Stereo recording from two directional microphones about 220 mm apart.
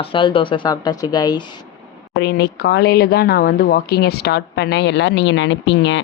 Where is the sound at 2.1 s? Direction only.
50° left (ahead or behind).